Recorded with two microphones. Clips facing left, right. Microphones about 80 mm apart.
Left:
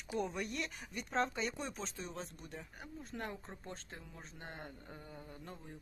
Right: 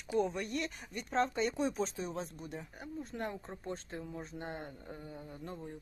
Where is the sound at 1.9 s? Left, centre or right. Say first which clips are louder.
Right 6 dB; centre.